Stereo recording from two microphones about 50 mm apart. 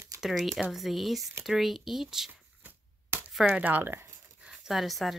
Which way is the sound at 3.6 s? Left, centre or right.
Right.